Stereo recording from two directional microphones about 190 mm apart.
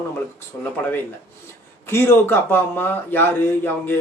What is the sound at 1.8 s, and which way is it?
Speech, 10° left (ahead or behind).